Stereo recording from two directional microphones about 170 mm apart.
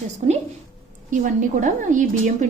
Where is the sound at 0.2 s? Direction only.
35° right (ahead or behind).